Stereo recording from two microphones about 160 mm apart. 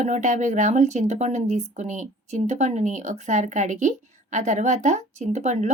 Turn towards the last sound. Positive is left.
turn(degrees=-45)  # may be behind; listen again after turning